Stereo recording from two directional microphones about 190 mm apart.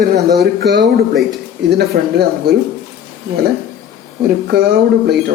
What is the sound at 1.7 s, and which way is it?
Speech, 60° right (ahead or behind).